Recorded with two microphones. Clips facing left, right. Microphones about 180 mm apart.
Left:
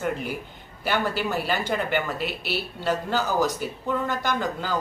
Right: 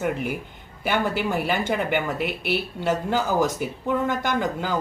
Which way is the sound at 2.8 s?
20° right (ahead or behind).